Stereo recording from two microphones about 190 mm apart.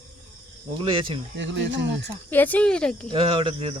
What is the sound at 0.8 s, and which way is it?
Speech, 25° right (ahead or behind).